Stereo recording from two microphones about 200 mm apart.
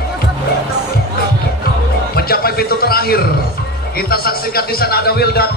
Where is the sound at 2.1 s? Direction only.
50° left (ahead or behind).